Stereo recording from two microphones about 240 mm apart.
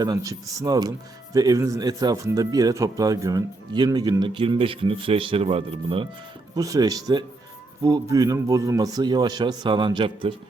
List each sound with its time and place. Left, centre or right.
0.0 s speech: centre